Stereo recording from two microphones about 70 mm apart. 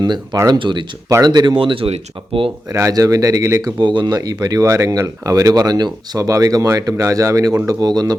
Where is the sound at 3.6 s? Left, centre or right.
Right.